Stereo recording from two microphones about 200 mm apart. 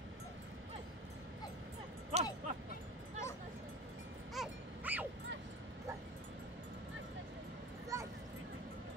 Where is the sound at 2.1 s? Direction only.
30° right (ahead or behind).